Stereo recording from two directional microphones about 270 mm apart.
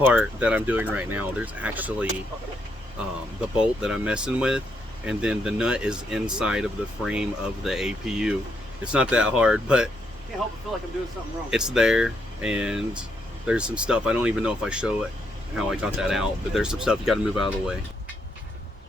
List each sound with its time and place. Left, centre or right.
0.0 s speech: centre
3.8 s speech: centre
11.5 s speech: centre